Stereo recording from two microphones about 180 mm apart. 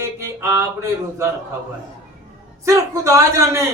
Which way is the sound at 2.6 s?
15° right (ahead or behind).